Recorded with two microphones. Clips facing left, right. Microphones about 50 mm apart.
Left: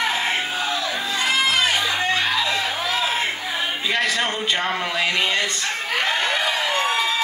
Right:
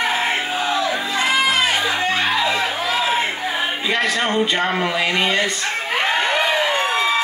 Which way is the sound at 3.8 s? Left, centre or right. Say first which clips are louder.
Right 2 dB; centre.